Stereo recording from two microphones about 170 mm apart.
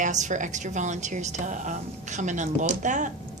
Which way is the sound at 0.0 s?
45° right (ahead or behind).